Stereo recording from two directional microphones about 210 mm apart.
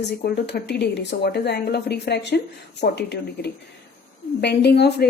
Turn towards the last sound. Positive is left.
turn(degrees=50)  # may be behind; listen again after turning